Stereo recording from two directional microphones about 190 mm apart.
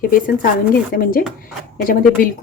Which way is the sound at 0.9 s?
50° left (ahead or behind).